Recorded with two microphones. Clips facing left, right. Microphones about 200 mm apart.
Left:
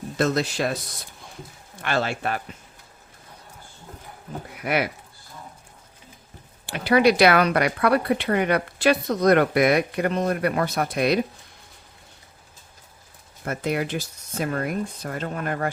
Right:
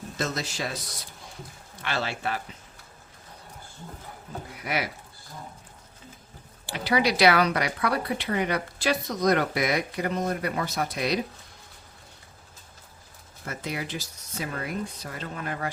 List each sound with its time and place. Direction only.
0.2 s speech: 60° left (ahead or behind)
1.8 s speech: 50° left (ahead or behind)
4.6 s speech: 60° left (ahead or behind)
6.7 s speech: 55° left (ahead or behind)
13.4 s speech: 55° left (ahead or behind)